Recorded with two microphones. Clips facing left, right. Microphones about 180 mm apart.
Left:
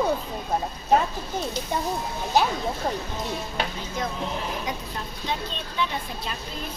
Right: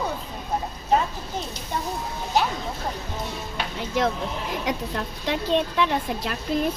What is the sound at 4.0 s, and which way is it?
A woman's voice, 75° right (ahead or behind).